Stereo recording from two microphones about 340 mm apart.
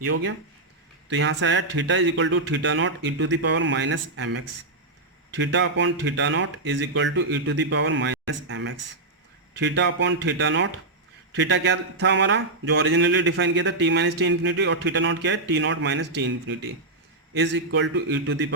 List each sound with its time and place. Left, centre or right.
0.1 s speech: right